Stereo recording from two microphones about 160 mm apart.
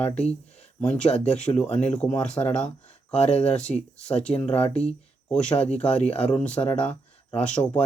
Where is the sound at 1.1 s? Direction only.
25° left (ahead or behind).